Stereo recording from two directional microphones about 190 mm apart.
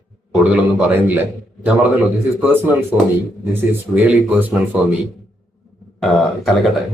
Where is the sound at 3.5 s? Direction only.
10° right (ahead or behind).